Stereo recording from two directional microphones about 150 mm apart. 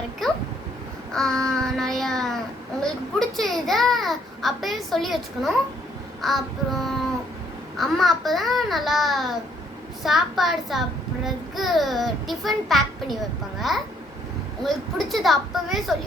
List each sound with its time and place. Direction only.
0.2 s a sound: centre (ahead or behind)
1.5 s child singing: 5° left (ahead or behind)
2.8 s a child's voice: centre (ahead or behind)